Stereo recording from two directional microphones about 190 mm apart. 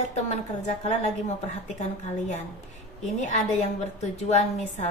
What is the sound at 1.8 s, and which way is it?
Speech, 40° left (ahead or behind).